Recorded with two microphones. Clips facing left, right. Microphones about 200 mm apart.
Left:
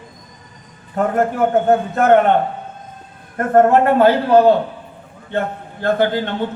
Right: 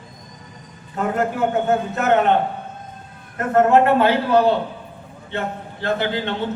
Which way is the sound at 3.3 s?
50° left (ahead or behind).